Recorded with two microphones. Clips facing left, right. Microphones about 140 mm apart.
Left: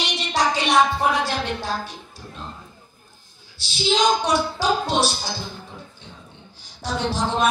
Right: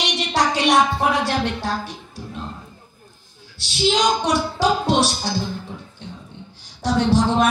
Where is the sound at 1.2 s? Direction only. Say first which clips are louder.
Right 3 dB; 70° right (ahead or behind).